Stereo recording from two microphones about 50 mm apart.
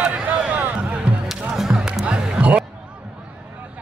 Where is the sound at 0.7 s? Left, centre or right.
Right.